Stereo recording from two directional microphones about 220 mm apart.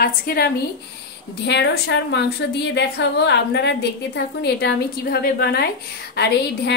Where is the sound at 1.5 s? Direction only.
50° left (ahead or behind).